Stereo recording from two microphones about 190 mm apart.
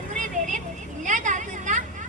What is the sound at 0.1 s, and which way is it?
Vehicle, 40° right (ahead or behind).